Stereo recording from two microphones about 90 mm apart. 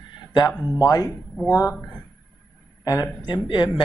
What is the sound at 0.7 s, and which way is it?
Speech, 45° left (ahead or behind).